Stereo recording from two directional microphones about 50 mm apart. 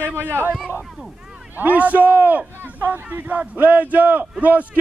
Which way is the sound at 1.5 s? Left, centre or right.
Right.